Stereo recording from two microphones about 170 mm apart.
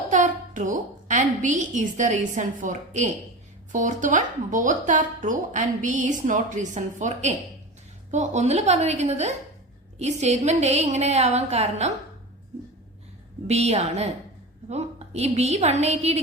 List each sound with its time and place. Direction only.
0.1 s a woman's voice: 50° right (ahead or behind)
13.5 s a woman's voice: 40° right (ahead or behind)